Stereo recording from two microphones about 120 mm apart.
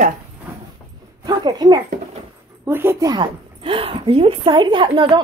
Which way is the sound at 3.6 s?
50° right (ahead or behind).